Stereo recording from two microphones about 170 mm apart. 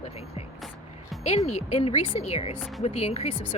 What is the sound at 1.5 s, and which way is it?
A woman's voice, 35° left (ahead or behind).